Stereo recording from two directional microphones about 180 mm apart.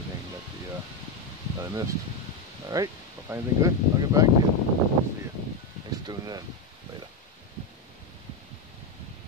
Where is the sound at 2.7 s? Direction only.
15° right (ahead or behind).